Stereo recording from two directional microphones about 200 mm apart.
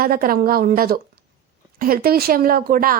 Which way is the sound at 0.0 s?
45° right (ahead or behind).